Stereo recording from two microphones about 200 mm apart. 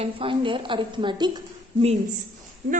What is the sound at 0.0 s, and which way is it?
A woman's voice, 25° right (ahead or behind).